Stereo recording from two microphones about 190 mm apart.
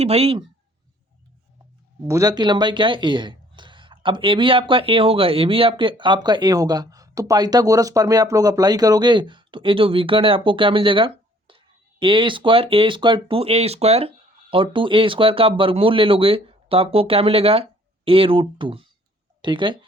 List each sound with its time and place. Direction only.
0.0 s speech: 35° right (ahead or behind)
2.0 s speech: 20° right (ahead or behind)